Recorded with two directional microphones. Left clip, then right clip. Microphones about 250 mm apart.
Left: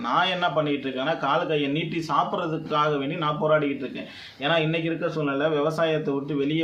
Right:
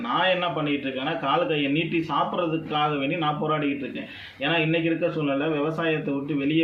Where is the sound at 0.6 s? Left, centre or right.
Centre.